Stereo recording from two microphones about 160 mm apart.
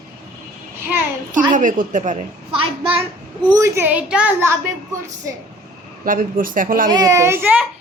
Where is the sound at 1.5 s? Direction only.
55° right (ahead or behind).